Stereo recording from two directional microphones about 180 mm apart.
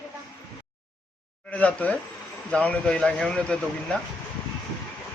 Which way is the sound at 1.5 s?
10° left (ahead or behind).